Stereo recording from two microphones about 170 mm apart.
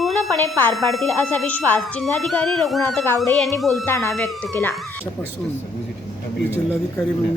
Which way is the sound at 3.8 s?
15° left (ahead or behind).